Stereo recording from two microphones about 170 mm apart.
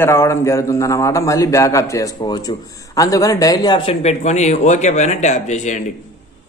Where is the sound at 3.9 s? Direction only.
40° left (ahead or behind).